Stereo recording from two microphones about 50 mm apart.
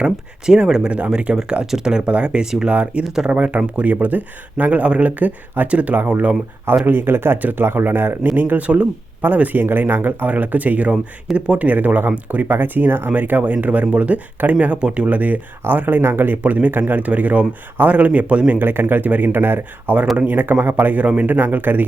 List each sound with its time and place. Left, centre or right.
0.4 s speech: centre
3.0 s speech: centre
3.2 s speech: right
6.8 s speech: right
8.4 s speech: right
16.4 s speech: right
18.7 s speech: right
20.1 s speech: right